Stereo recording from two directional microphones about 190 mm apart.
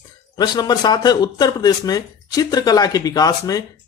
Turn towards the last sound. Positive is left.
turn(degrees=20)  # may be behind; listen again after turning